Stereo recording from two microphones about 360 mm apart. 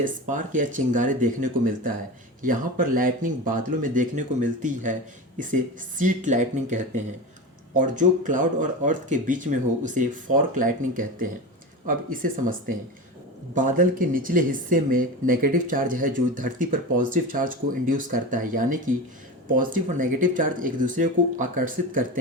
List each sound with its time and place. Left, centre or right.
0.0 s speech: right
6.0 s speech: right
13.5 s speech: right